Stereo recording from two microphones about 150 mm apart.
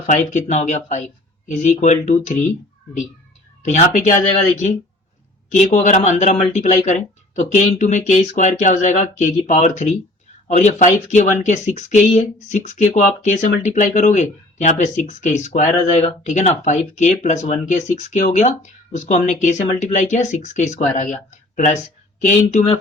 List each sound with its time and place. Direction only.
0.0 s speech: 55° left (ahead or behind)
3.6 s speech: 55° left (ahead or behind)